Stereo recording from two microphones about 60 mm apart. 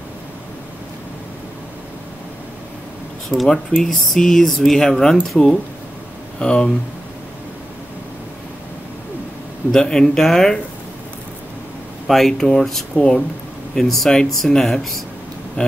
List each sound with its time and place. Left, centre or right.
3.3 s speech: centre
6.4 s speech: centre
9.7 s speech: centre
12.1 s speech: centre
13.7 s speech: centre